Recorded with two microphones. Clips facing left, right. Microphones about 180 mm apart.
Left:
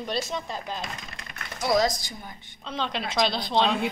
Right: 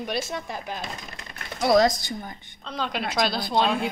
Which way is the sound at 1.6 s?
65° right (ahead or behind).